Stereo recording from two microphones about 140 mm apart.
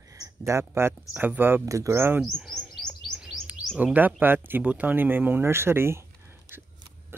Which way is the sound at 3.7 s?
10° right (ahead or behind).